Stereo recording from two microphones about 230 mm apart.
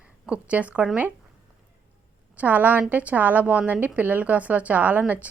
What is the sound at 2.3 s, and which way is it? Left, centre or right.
A woman's voice, centre.